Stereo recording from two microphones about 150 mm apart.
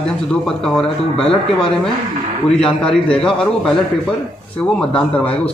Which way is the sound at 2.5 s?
5° left (ahead or behind).